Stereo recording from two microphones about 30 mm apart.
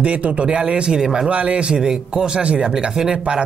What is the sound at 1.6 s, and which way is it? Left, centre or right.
Speech, right.